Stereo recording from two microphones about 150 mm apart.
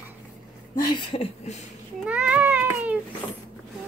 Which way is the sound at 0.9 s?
30° left (ahead or behind).